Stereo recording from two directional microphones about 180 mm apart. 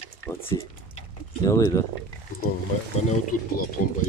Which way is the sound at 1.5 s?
15° left (ahead or behind).